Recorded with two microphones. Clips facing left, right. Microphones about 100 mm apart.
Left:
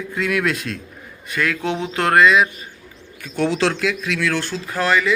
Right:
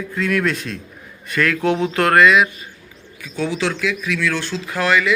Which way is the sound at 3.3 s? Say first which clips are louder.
Left 3 dB; 75° left (ahead or behind).